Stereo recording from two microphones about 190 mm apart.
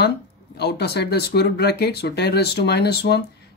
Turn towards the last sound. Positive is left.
turn(degrees=60)  # may be behind; listen again after turning